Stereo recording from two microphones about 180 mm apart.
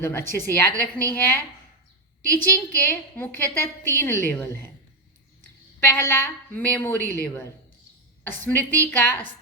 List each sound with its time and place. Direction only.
0.0 s a woman's voice: 15° left (ahead or behind)
2.4 s a woman's voice: 10° left (ahead or behind)
5.8 s a woman's voice: 10° left (ahead or behind)